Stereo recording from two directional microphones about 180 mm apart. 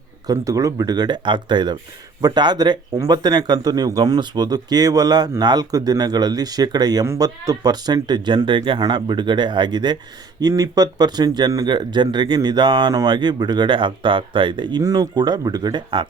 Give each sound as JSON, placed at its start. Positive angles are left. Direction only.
{"t": 0.3, "sound": "speech", "side_deg": -20}